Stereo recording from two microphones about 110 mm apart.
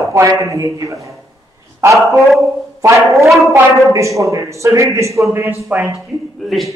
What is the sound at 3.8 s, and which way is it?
A man's voice, 30° right (ahead or behind).